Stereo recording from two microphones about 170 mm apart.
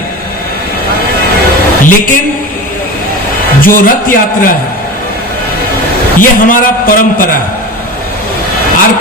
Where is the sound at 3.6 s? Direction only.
55° left (ahead or behind).